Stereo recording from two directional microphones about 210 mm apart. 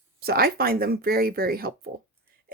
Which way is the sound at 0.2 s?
45° right (ahead or behind).